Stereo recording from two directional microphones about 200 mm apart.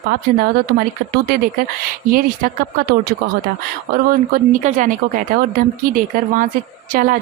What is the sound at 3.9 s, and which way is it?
A woman's voice, 45° right (ahead or behind).